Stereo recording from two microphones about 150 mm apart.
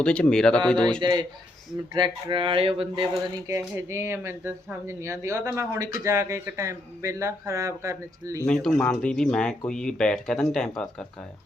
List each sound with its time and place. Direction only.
0.0 s speech: 5° left (ahead or behind)
1.0 s speech: 30° right (ahead or behind)
3.8 s speech: 15° right (ahead or behind)
8.4 s speech: 5° left (ahead or behind)